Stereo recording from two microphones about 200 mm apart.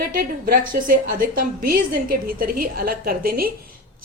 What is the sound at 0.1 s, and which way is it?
Speech, 45° right (ahead or behind).